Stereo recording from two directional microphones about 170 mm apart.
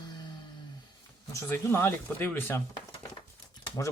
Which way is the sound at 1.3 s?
15° left (ahead or behind).